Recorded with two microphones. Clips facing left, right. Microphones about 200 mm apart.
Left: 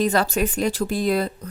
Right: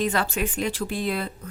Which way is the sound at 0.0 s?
40° left (ahead or behind).